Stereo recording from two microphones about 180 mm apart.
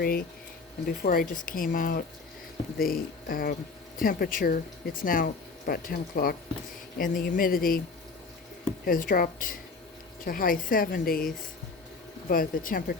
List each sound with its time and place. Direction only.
0.0 s speech: 55° left (ahead or behind)
8.8 s speech: 50° left (ahead or behind)